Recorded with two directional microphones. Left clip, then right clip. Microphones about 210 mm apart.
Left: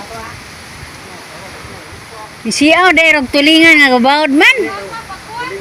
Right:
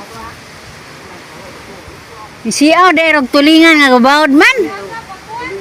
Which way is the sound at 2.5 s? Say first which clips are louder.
Right 1 dB; 10° right (ahead or behind).